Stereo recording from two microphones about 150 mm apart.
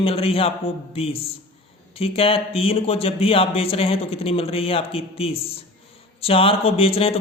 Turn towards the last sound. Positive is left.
turn(degrees=40)  # may be behind; listen again after turning